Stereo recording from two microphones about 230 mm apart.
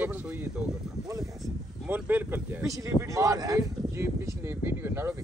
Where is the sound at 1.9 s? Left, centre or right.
Centre.